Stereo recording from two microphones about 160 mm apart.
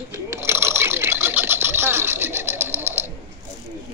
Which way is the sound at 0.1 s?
15° right (ahead or behind).